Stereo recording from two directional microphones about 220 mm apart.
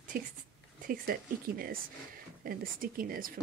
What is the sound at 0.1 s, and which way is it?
Speech, 40° right (ahead or behind).